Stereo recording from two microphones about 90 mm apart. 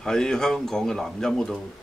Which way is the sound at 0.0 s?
5° left (ahead or behind).